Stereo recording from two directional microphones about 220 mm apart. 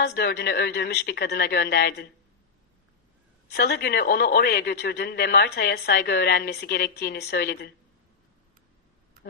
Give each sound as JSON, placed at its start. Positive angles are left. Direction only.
{"t": 0.0, "sound": "a man's voice", "side_deg": 45}
{"t": 3.5, "sound": "a man's voice", "side_deg": 45}